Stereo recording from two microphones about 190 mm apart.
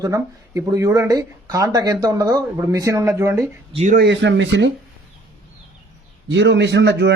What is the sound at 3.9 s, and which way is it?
Speech, 65° right (ahead or behind).